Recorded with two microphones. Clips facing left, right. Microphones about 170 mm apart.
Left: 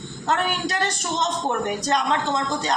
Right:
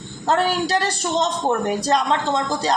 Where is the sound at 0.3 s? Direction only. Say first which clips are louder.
Right 5 dB; 35° right (ahead or behind).